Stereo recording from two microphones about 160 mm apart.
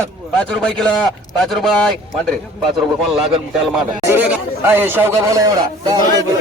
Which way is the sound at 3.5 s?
Centre (ahead or behind).